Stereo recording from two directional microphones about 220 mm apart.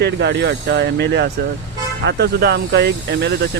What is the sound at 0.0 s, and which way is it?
Speech, 50° right (ahead or behind).